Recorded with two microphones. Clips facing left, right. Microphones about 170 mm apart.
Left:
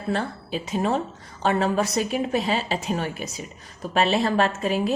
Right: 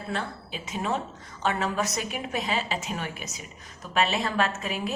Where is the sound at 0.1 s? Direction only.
35° left (ahead or behind).